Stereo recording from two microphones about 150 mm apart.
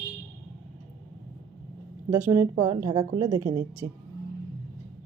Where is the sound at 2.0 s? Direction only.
15° right (ahead or behind).